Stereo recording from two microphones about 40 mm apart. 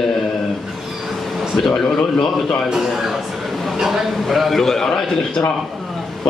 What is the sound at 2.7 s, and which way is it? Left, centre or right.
Speech, centre.